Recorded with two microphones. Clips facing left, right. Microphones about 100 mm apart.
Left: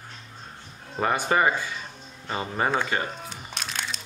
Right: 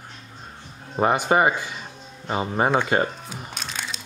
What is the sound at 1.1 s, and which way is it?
Speech, 10° right (ahead or behind).